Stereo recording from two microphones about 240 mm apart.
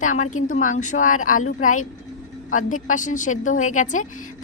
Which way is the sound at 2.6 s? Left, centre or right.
Left.